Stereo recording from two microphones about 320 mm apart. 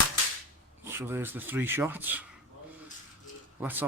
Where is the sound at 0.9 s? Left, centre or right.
Centre.